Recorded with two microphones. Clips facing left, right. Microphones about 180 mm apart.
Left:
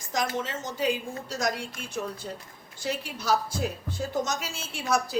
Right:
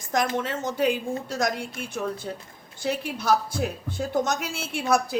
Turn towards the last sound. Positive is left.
turn(degrees=-60)  # may be behind; listen again after turning